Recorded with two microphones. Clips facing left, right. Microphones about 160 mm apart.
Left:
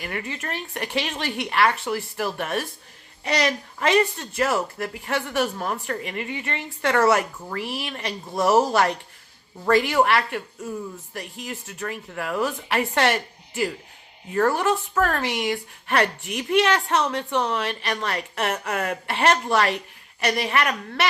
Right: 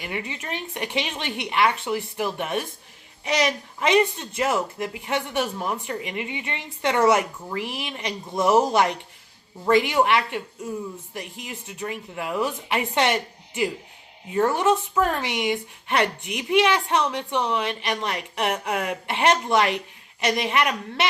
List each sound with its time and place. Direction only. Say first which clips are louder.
0.0 s speech: left 1 dB; 15° right (ahead or behind)